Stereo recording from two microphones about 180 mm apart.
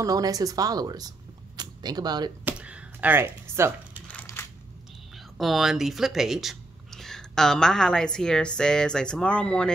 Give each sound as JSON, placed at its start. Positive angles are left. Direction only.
{"t": 0.0, "sound": "speech", "side_deg": -20}
{"t": 2.4, "sound": "a sound", "side_deg": -10}
{"t": 4.1, "sound": "crushing", "side_deg": 10}
{"t": 5.1, "sound": "speech", "side_deg": 0}